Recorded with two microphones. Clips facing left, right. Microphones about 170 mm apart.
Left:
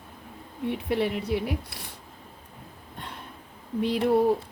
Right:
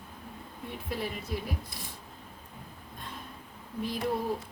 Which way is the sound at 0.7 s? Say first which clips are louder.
Left 9 dB; 70° left (ahead or behind).